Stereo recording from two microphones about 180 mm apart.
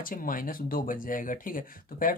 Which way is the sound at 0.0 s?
50° left (ahead or behind).